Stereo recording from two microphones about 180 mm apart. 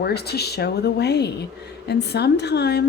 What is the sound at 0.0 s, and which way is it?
A woman's voice, 65° left (ahead or behind).